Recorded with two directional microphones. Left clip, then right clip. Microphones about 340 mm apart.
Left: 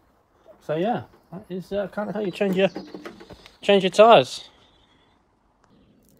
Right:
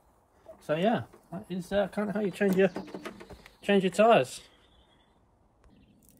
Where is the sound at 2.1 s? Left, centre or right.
Centre.